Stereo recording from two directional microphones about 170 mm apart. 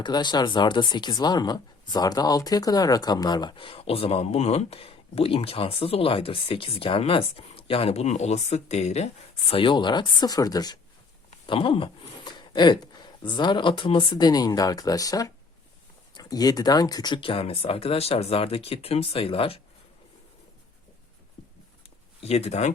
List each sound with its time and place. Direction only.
0.0 s speech: 25° left (ahead or behind)
22.2 s speech: 40° left (ahead or behind)